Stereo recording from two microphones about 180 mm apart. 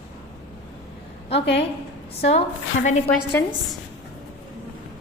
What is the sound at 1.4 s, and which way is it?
Speech, 75° left (ahead or behind).